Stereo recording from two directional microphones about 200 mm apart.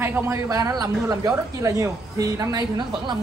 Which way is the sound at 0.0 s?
15° right (ahead or behind).